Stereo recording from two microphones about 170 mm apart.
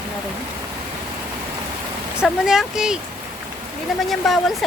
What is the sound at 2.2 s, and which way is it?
Speech, centre (ahead or behind).